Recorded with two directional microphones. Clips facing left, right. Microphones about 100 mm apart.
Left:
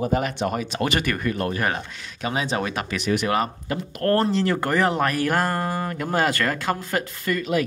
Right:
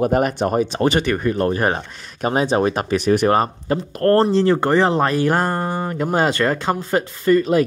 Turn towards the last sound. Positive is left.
turn(degrees=-35)  # may be behind; listen again after turning